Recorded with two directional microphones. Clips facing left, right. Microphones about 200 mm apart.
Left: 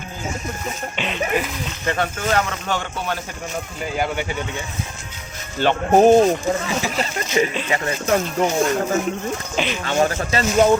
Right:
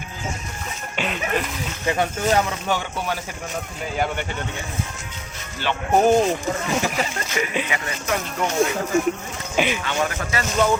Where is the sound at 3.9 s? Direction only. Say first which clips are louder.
Left 1 dB; 5° left (ahead or behind).